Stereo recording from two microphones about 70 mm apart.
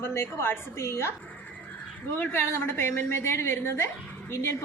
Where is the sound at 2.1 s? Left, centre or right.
Left.